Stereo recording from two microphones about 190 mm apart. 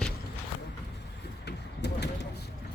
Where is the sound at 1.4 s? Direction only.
60° left (ahead or behind).